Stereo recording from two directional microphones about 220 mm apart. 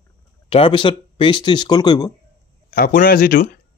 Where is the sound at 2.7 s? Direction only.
40° left (ahead or behind).